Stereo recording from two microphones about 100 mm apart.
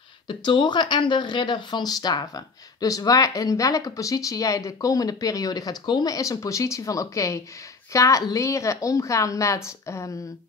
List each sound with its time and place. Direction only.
0.3 s speech: 55° left (ahead or behind); by 10.1 s 30° left (ahead or behind)